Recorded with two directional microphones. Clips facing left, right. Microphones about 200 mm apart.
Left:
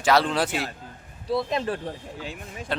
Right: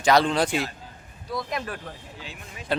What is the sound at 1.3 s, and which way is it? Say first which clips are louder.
Speech: left 6 dB; 25° left (ahead or behind).